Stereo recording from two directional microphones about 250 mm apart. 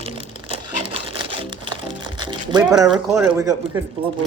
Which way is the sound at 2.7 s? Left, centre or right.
Centre.